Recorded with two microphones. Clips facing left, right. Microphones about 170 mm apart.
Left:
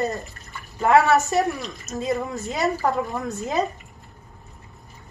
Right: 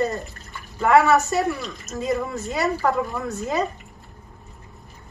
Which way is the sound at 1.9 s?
20° left (ahead or behind).